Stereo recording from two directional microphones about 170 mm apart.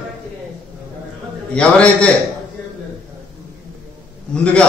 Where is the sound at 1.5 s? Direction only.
5° left (ahead or behind).